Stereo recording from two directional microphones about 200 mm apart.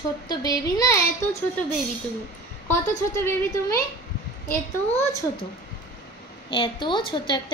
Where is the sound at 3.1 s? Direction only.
15° left (ahead or behind).